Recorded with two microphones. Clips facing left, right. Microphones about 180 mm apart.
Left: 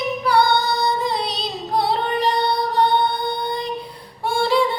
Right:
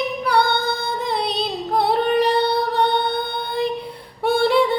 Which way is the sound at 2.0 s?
65° right (ahead or behind).